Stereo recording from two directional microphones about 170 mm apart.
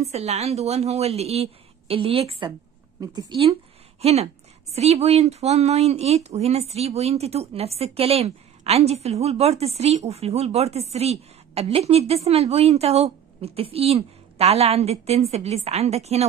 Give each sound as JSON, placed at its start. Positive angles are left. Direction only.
{"t": 0.1, "sound": "a woman's voice", "side_deg": -40}
{"t": 3.0, "sound": "a woman's voice", "side_deg": -25}
{"t": 4.0, "sound": "a woman's voice", "side_deg": -40}